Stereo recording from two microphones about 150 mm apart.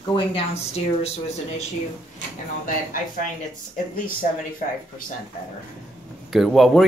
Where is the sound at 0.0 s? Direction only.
30° left (ahead or behind).